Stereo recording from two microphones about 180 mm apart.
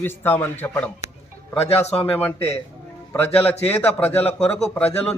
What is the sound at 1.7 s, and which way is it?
Speech, 35° left (ahead or behind).